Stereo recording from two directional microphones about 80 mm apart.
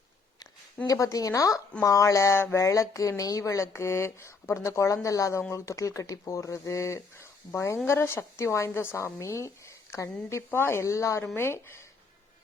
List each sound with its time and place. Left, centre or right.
0.9 s speech: left